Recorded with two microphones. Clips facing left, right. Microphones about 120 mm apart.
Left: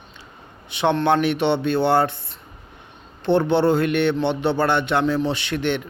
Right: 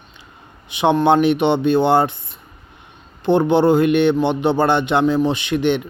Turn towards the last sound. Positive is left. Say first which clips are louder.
# right 5 dB
turn(degrees=-15)  # may be behind; listen again after turning